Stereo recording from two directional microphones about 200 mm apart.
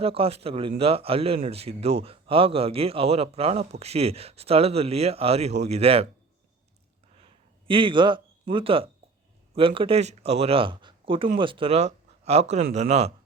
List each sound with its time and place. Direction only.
0.0 s a man's voice: 30° right (ahead or behind)
7.7 s a man's voice: 25° right (ahead or behind)